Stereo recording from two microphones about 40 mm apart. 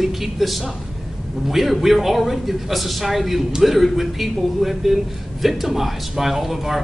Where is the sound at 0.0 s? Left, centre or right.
Centre.